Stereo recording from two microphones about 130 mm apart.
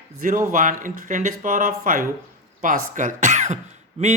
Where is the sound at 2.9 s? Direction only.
75° right (ahead or behind).